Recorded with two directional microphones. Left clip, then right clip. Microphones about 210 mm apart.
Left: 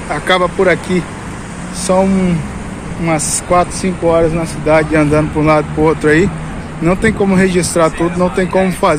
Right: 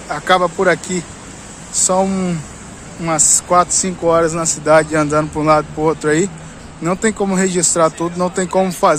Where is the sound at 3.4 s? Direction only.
30° right (ahead or behind).